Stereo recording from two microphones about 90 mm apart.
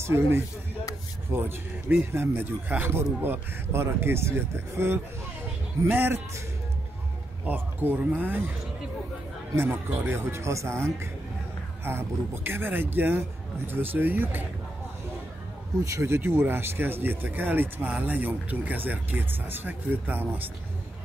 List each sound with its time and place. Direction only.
0.0 s speech: 30° right (ahead or behind)
7.4 s speech: 20° right (ahead or behind)
9.6 s speech: 25° right (ahead or behind)
15.8 s speech: 35° right (ahead or behind)